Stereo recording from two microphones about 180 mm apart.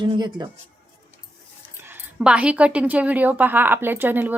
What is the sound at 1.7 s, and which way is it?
A woman's voice, 10° right (ahead or behind).